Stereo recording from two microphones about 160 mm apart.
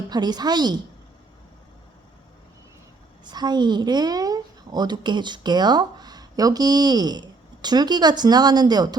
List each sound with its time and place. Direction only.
0.1 s a woman's voice: 25° right (ahead or behind)
3.2 s speech: 25° right (ahead or behind)